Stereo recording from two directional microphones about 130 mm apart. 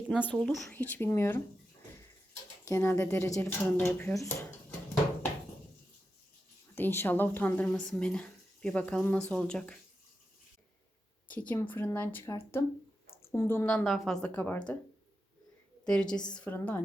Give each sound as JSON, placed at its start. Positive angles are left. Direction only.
{"t": 0.3, "sound": "speech", "side_deg": 5}
{"t": 2.6, "sound": "speech", "side_deg": 20}
{"t": 6.7, "sound": "speech", "side_deg": 15}
{"t": 11.3, "sound": "a woman's voice", "side_deg": 15}
{"t": 13.7, "sound": "a woman's voice", "side_deg": 0}
{"t": 14.3, "sound": "speech", "side_deg": 15}
{"t": 15.9, "sound": "speech", "side_deg": 5}